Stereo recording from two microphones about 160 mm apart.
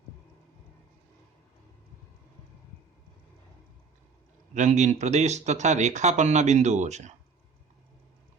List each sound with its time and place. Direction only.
4.5 s speech: 50° right (ahead or behind)